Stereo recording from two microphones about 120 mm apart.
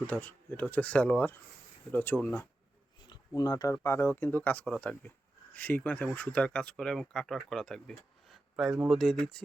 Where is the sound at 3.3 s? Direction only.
30° left (ahead or behind).